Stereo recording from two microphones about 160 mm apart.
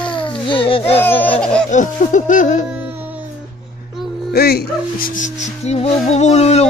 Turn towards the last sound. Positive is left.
turn(degrees=45)  # may be behind; listen again after turning